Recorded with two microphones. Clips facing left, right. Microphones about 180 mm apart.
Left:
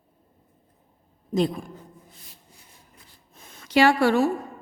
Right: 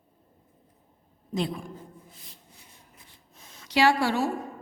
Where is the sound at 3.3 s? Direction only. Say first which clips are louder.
Left 5 dB; 55° left (ahead or behind).